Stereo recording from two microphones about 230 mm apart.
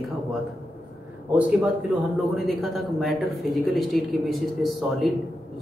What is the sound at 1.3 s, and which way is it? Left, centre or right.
A man's voice, centre.